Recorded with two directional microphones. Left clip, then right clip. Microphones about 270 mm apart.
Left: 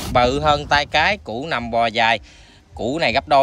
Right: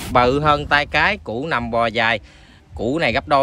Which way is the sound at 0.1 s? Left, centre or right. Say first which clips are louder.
Right 1 dB; centre.